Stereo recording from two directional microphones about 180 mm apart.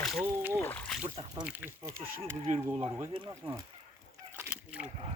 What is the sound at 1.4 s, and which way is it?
Speech, 10° right (ahead or behind).